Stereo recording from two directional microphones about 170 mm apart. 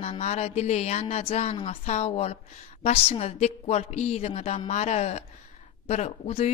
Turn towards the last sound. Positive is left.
turn(degrees=40)  # may be behind; listen again after turning